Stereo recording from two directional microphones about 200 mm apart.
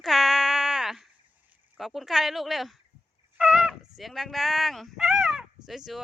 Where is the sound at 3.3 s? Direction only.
Centre (ahead or behind).